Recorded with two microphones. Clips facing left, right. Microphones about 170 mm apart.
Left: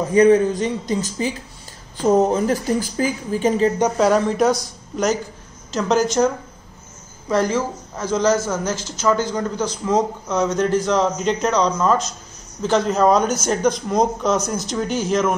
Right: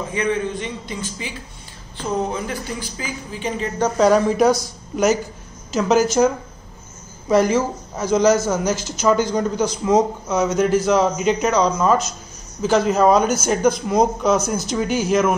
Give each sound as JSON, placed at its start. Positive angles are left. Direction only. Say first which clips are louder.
{"t": 0.0, "sound": "a man's voice", "louder": "left 9 dB", "side_deg": 40}
{"t": 4.0, "sound": "speech", "louder": "right 3 dB", "side_deg": 0}